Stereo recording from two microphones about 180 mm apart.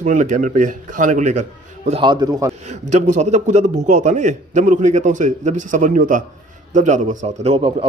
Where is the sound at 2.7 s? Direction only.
40° right (ahead or behind).